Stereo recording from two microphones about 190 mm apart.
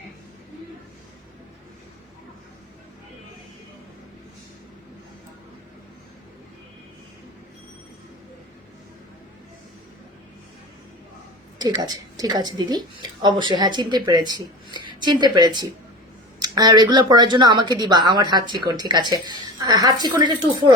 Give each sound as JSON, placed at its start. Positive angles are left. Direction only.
{"t": 11.6, "sound": "speech", "side_deg": -20}